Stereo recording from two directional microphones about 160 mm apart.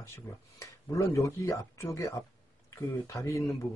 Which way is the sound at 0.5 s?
15° left (ahead or behind).